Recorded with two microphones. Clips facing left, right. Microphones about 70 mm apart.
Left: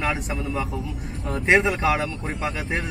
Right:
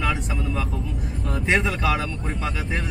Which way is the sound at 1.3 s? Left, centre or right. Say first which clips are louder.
Left 3 dB; left.